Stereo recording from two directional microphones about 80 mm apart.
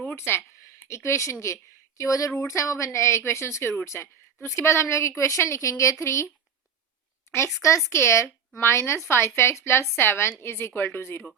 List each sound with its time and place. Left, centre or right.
0.0 s a sound: left
0.8 s a woman's voice: left
7.6 s a woman's voice: left